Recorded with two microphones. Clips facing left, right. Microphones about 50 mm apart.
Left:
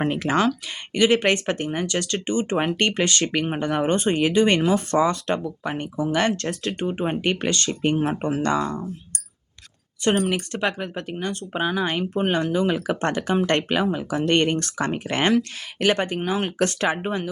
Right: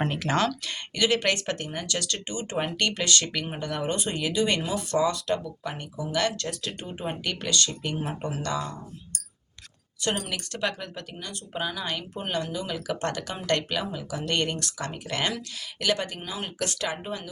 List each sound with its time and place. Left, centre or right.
0.0 s speech: centre
0.9 s speech: left
10.0 s speech: left